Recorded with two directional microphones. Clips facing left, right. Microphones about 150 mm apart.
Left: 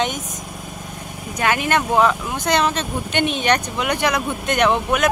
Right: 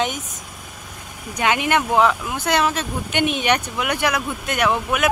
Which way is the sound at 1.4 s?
15° right (ahead or behind).